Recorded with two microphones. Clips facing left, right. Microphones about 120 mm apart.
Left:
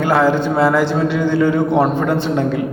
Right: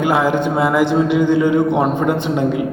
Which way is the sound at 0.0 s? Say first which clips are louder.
Left 1 dB; 15° right (ahead or behind).